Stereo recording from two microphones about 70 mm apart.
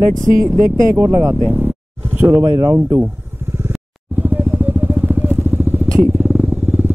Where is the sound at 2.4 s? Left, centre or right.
Right.